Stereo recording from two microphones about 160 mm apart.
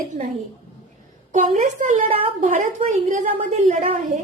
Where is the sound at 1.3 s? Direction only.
50° right (ahead or behind).